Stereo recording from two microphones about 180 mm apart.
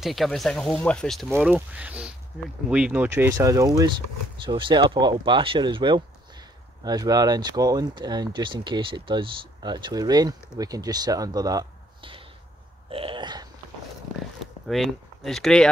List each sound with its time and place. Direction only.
0.0 s speech: centre (ahead or behind)
1.3 s speech: 10° right (ahead or behind); by 12.2 s 25° right (ahead or behind)
12.9 s a sound: 30° right (ahead or behind)
14.4 s speech: centre (ahead or behind)